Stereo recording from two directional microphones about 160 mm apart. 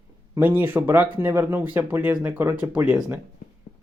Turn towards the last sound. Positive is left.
turn(degrees=-20)  # may be behind; listen again after turning